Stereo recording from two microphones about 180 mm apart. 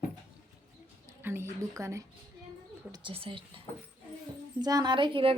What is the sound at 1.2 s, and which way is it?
Speech, 15° right (ahead or behind).